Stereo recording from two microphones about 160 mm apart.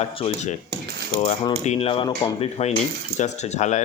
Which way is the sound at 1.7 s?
40° left (ahead or behind).